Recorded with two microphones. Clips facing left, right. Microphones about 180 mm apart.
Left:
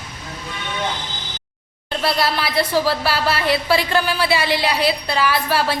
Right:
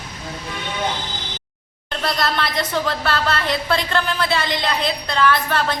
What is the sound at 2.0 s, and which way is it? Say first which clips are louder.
A woman's voice: left 2 dB; 5° left (ahead or behind).